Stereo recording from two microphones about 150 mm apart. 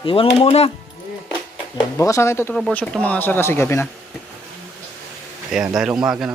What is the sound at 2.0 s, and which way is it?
Speech, 20° left (ahead or behind).